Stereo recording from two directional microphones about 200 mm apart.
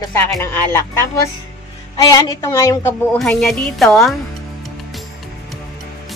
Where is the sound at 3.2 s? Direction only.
Centre (ahead or behind).